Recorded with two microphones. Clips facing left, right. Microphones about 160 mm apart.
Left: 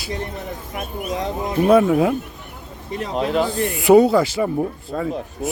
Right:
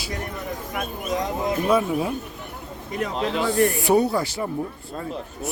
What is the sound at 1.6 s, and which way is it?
Speech, 65° left (ahead or behind).